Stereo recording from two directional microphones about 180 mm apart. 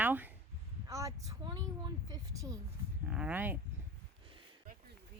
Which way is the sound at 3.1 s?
5° right (ahead or behind).